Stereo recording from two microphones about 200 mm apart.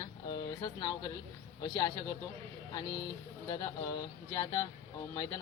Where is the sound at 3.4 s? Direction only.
15° left (ahead or behind).